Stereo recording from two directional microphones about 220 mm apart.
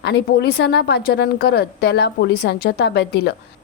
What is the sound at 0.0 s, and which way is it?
A woman's voice, 50° left (ahead or behind).